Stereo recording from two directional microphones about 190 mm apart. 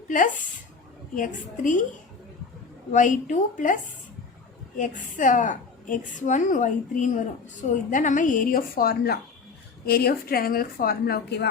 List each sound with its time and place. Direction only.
1.1 s a woman's voice: 45° left (ahead or behind)
2.9 s a woman's voice: 40° left (ahead or behind)
4.8 s a woman's voice: 45° left (ahead or behind); by 11.4 s 60° left (ahead or behind)